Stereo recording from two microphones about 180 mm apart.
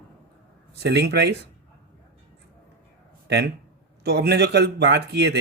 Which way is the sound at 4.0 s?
65° right (ahead or behind).